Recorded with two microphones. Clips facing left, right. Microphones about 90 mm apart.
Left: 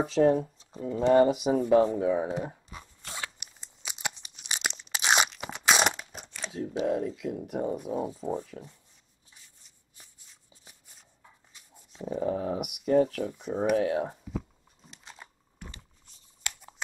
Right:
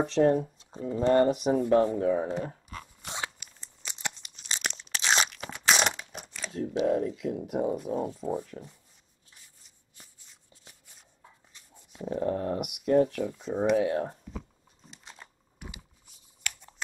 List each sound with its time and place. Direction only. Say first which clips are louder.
0.0 s speech: even; centre (ahead or behind)
0.7 s a sound: even; 20° right (ahead or behind)
1.1 s speech: left 2 dB; 5° left (ahead or behind)
1.6 s speech: left 2 dB; 15° left (ahead or behind)
3.0 s crunch: right 2 dB; 20° right (ahead or behind)
3.5 s crunch: left 1 dB; 10° left (ahead or behind)
6.5 s speech: right 2 dB; centre (ahead or behind)
12.0 s speech: even; 5° left (ahead or behind)
13.2 s speech: right 1 dB; 15° left (ahead or behind)
13.7 s crumpling: even; 5° left (ahead or behind)
15.6 s a sound: right 1 dB; 10° right (ahead or behind)